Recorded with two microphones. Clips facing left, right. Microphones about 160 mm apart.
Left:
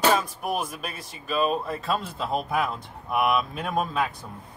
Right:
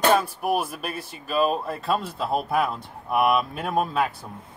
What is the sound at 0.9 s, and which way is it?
Speech, 55° right (ahead or behind).